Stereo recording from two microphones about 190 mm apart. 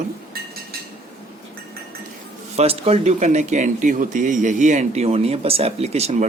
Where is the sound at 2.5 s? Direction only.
30° right (ahead or behind).